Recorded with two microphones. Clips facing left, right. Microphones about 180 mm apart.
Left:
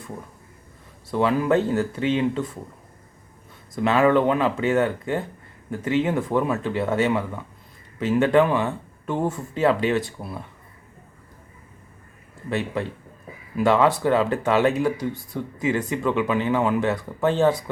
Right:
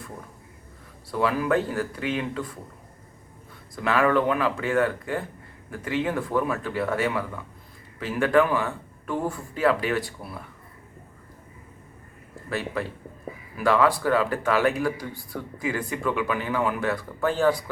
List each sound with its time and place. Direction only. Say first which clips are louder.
1.1 s speech: left 3 dB; 25° left (ahead or behind)
3.8 s speech: left 4 dB; 25° left (ahead or behind)
12.5 s speech: left 3 dB; 20° left (ahead or behind)